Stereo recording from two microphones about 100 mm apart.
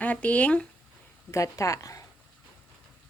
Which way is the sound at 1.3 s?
35° left (ahead or behind).